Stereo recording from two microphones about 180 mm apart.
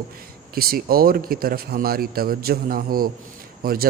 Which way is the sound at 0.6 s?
55° right (ahead or behind).